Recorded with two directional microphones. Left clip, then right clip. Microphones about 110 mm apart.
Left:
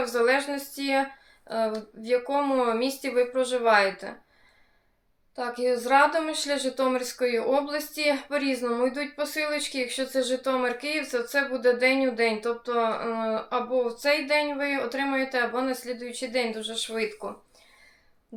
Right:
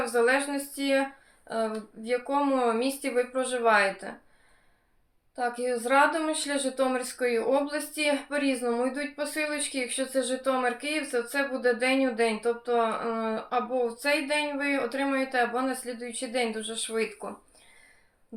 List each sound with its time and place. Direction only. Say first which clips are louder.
0.0 s a woman's voice: left 1 dB; 30° left (ahead or behind)
5.4 s a woman's voice: left 2 dB; 30° left (ahead or behind)